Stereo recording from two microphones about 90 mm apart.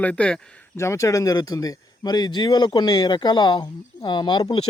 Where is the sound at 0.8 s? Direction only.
35° left (ahead or behind).